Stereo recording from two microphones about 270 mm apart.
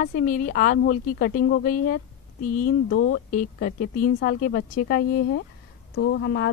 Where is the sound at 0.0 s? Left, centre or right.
Left.